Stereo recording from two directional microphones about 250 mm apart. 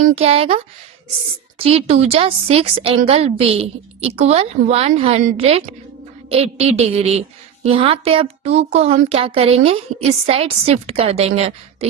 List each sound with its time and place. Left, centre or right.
0.0 s a woman's voice: right